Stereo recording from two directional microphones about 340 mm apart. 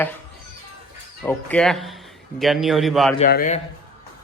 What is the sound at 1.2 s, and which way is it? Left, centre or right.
Speech, centre.